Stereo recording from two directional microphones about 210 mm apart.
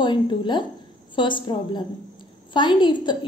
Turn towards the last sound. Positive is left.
turn(degrees=20)  # may be behind; listen again after turning